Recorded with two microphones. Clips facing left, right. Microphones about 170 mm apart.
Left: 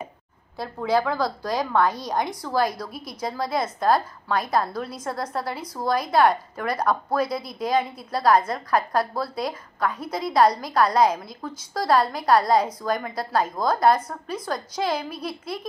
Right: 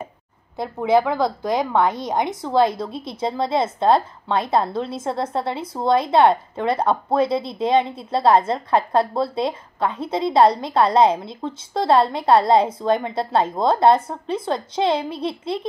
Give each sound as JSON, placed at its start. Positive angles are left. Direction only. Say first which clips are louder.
{"t": 0.6, "sound": "a woman's voice", "louder": "right 5 dB", "side_deg": -20}